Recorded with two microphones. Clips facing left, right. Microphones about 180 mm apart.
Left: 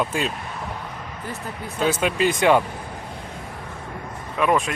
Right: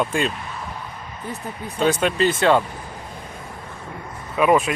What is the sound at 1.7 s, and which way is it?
Speech, 5° left (ahead or behind).